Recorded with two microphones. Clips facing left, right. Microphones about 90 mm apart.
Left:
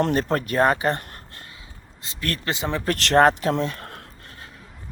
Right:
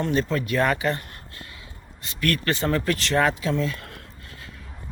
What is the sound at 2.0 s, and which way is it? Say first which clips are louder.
Speech: right 4 dB; 30° left (ahead or behind).